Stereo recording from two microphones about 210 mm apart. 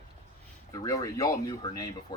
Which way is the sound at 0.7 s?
15° left (ahead or behind).